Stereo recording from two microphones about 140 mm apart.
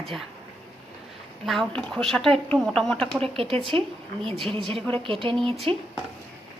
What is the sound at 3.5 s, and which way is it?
Speech, 40° right (ahead or behind).